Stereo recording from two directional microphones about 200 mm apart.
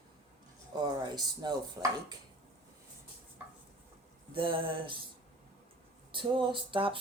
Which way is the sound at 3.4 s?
10° right (ahead or behind).